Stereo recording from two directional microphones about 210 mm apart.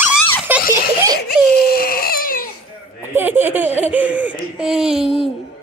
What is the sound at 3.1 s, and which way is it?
Laughter, 10° right (ahead or behind).